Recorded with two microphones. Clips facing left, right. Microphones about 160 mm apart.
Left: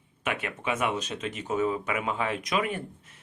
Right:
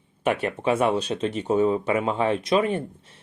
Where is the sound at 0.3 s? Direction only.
35° right (ahead or behind).